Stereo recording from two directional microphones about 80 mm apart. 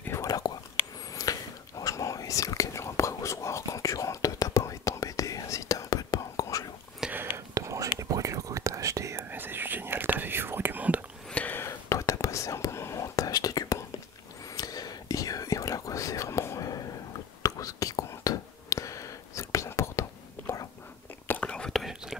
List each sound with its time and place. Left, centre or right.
0.2 s whispering: left
7.1 s whispering: right
7.3 s whispering: right
9.3 s whispering: right
11.3 s whispering: left
11.6 s whispering: left
21.3 s whispering: centre